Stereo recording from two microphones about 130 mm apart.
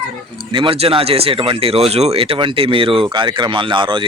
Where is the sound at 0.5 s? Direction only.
45° right (ahead or behind).